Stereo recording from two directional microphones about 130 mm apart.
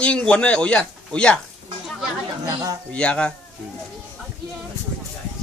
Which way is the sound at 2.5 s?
25° right (ahead or behind).